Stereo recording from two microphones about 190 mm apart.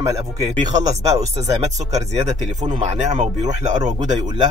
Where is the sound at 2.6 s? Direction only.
35° right (ahead or behind).